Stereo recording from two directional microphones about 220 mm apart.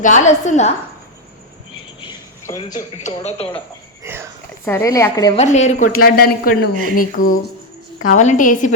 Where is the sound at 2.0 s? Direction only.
20° left (ahead or behind).